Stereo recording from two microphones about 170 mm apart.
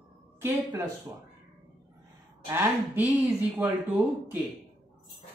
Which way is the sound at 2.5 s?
15° right (ahead or behind).